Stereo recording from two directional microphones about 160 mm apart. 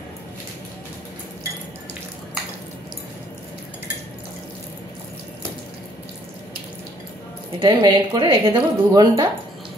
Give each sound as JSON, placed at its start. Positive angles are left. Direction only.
{"t": 7.6, "sound": "speech", "side_deg": -25}